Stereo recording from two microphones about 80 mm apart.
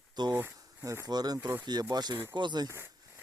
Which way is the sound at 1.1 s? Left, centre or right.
Right.